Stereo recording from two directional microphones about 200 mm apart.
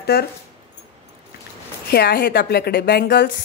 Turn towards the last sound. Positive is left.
turn(degrees=55)  # may be behind; listen again after turning